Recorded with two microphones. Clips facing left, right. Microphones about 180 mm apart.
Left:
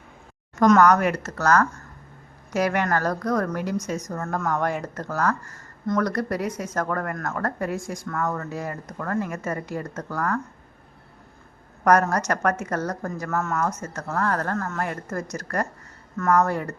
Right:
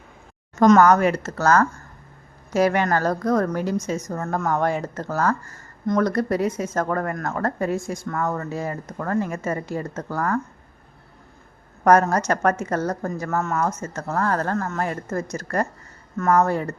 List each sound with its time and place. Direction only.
0.6 s a woman's voice: 25° right (ahead or behind)
11.9 s a woman's voice: 25° right (ahead or behind)